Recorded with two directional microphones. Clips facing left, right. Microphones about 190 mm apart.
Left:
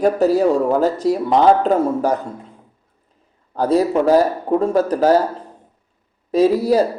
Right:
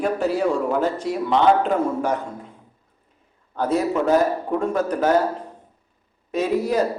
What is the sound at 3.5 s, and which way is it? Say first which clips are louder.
Speech: left 5 dB; 35° left (ahead or behind).